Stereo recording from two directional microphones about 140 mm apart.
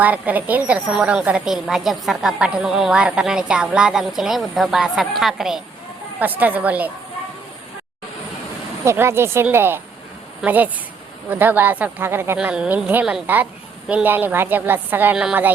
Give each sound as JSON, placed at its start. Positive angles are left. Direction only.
{"t": 0.0, "sound": "a woman's voice", "side_deg": -10}
{"t": 8.8, "sound": "a woman's voice", "side_deg": -20}